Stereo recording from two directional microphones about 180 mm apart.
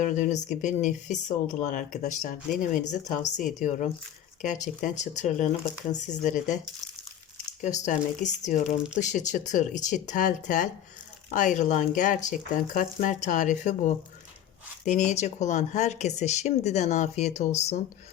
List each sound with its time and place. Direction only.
0.0 s speech: 45° left (ahead or behind)
7.6 s speech: 40° left (ahead or behind)
8.6 s speech: 5° right (ahead or behind)
9.0 s speech: 40° left (ahead or behind)